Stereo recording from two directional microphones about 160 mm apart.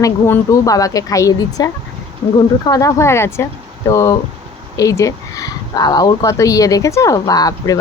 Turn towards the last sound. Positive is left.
turn(degrees=25)  # may be behind; listen again after turning